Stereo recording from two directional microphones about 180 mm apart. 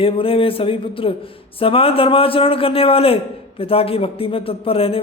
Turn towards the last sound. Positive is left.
turn(degrees=30)  # may be behind; listen again after turning